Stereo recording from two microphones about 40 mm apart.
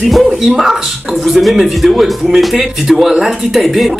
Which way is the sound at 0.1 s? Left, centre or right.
Centre.